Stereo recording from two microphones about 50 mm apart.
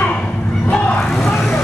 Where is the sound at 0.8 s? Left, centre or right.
Left.